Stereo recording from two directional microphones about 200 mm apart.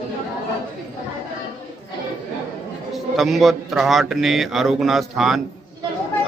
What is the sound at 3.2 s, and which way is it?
Speech, centre (ahead or behind).